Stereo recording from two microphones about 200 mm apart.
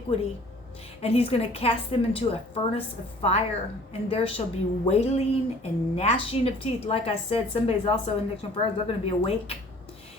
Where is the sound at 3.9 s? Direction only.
30° left (ahead or behind).